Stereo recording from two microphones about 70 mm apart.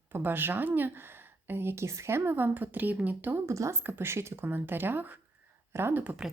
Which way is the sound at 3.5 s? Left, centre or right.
Right.